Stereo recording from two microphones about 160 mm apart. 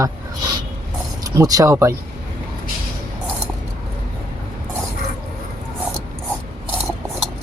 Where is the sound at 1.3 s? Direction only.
20° right (ahead or behind).